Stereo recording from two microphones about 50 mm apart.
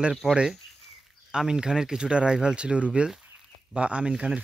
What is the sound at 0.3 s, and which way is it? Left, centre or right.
Speech, centre.